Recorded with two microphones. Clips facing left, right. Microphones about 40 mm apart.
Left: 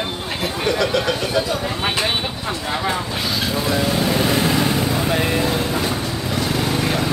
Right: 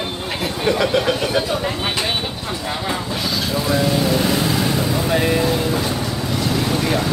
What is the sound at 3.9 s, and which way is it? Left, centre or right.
Vehicle, centre.